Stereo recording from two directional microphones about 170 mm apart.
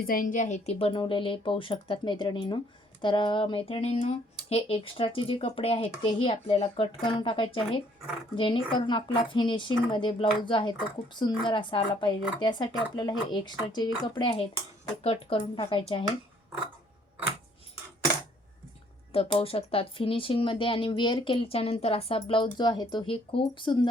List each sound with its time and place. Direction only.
0.1 s speech: 50° left (ahead or behind); by 16.0 s 35° left (ahead or behind)
19.1 s speech: 35° left (ahead or behind)